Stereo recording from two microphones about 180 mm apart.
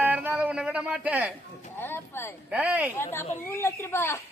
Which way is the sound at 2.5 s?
10° right (ahead or behind).